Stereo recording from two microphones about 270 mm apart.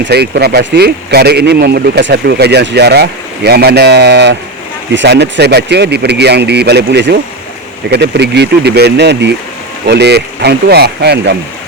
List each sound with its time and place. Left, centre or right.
0.0 s speech: right